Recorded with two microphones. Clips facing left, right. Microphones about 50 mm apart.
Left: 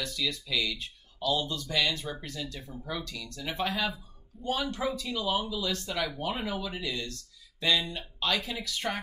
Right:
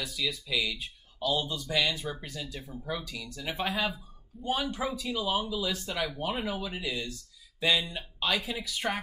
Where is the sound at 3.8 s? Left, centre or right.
Right.